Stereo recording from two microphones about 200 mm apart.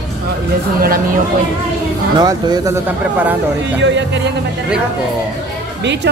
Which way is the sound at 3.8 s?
65° right (ahead or behind).